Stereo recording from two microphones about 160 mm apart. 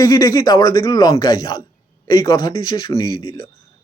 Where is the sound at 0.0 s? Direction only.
25° left (ahead or behind).